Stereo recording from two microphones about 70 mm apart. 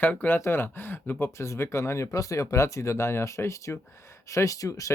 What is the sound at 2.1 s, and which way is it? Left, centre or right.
Speech, left.